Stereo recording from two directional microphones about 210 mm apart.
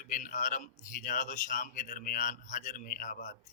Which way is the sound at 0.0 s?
40° left (ahead or behind).